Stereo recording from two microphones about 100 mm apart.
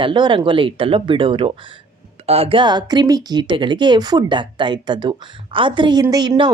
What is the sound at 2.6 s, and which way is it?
Speech, 45° right (ahead or behind).